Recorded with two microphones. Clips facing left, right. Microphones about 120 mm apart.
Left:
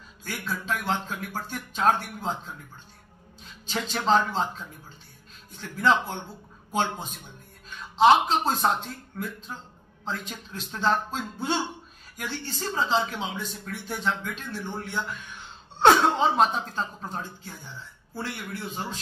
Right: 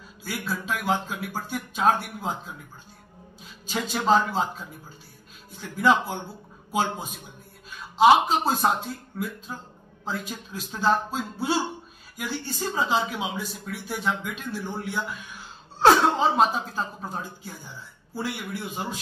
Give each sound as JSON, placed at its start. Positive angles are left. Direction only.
{"t": 0.2, "sound": "speech", "side_deg": -5}